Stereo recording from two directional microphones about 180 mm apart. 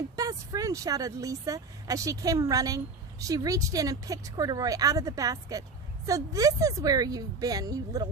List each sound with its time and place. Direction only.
0.2 s speech: 20° right (ahead or behind)